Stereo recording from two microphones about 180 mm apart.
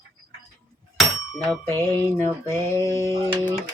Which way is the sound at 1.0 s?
Centre (ahead or behind).